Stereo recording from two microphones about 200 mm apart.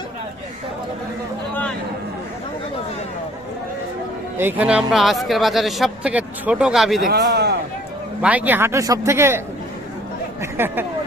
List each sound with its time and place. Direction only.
4.4 s speech: 10° right (ahead or behind)
7.1 s a man's voice: 55° right (ahead or behind)
8.2 s a man's voice: 5° right (ahead or behind)
10.4 s a man's voice: 10° right (ahead or behind)